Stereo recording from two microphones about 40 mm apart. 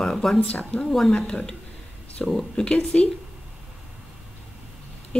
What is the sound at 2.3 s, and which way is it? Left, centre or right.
Speech, centre.